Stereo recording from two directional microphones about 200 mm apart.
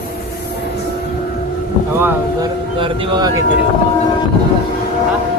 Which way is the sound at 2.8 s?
25° right (ahead or behind).